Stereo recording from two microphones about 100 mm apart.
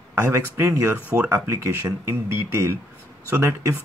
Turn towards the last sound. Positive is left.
turn(degrees=-25)  # may be behind; listen again after turning